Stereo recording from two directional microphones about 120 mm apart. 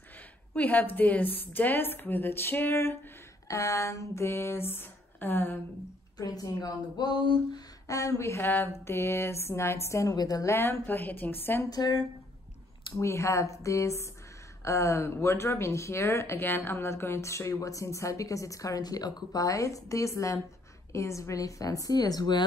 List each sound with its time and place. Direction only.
0.6 s speech: 15° left (ahead or behind)
6.1 s speech: 30° left (ahead or behind)
11.7 s speech: 35° left (ahead or behind)
12.9 s speech: 25° left (ahead or behind)